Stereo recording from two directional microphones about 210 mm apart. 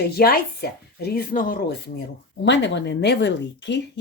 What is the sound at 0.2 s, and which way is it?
Speech, 45° left (ahead or behind).